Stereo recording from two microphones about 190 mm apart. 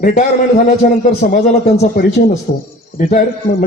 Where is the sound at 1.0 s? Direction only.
40° left (ahead or behind).